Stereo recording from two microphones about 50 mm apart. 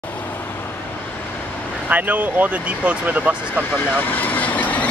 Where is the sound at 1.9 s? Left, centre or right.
Right.